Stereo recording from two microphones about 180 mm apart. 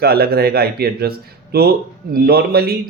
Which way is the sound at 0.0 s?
60° right (ahead or behind).